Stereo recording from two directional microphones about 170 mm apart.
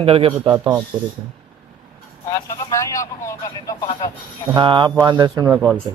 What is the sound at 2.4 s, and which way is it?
Speech, 20° left (ahead or behind).